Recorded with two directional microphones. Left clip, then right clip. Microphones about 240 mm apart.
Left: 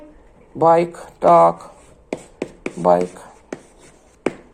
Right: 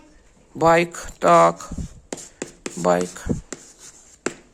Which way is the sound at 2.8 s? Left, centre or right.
Right.